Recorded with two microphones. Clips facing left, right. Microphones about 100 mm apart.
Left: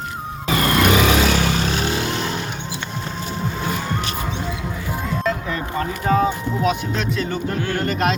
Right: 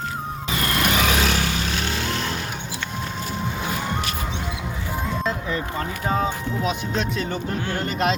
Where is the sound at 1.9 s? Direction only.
10° left (ahead or behind).